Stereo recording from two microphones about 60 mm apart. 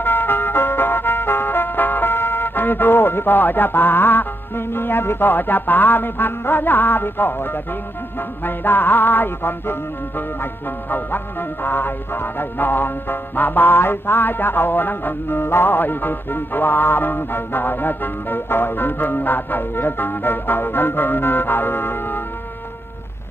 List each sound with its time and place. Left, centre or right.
0.0 s music: left